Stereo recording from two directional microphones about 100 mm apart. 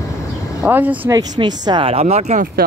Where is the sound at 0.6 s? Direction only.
15° right (ahead or behind).